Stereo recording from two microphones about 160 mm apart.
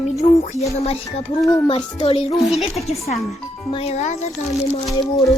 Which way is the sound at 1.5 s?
25° left (ahead or behind).